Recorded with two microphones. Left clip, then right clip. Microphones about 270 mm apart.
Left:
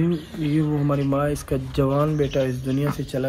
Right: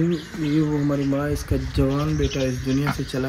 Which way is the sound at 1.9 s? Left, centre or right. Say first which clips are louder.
Left 3 dB; left.